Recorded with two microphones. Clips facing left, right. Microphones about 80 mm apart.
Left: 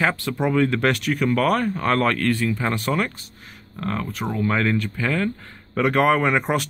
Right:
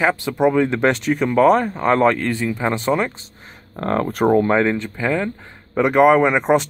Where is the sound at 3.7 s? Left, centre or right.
Right.